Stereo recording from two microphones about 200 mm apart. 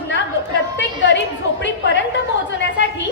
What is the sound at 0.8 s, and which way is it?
Speech, 65° left (ahead or behind).